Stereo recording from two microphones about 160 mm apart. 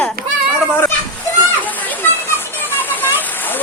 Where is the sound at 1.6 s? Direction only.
10° left (ahead or behind).